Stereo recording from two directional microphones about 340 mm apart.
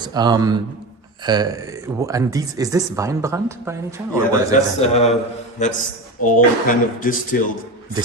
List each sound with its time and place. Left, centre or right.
0.0 s speech: centre
4.8 s a man's voice: centre